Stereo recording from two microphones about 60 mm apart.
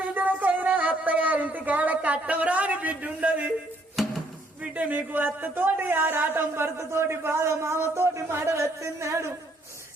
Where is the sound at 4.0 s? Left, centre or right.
Centre.